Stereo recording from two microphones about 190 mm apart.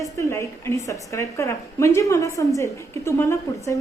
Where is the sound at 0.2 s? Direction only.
15° left (ahead or behind).